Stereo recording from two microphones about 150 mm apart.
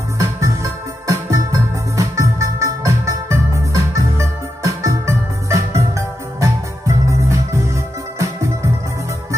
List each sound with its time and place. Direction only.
0.2 s music: 20° right (ahead or behind)